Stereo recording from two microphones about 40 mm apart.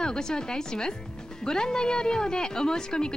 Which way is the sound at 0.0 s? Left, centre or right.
Centre.